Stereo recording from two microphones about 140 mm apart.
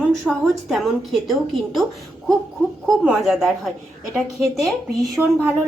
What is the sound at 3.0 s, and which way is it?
Speech, 5° right (ahead or behind).